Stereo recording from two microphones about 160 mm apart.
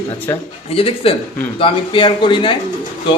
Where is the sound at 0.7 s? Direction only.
35° left (ahead or behind).